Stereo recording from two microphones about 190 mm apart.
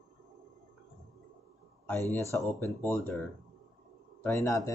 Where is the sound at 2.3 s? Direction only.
10° left (ahead or behind).